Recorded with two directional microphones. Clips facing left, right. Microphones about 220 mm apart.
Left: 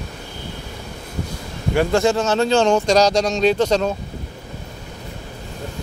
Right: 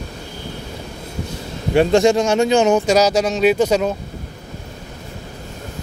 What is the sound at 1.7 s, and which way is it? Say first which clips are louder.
Speech: right 4 dB; 20° right (ahead or behind).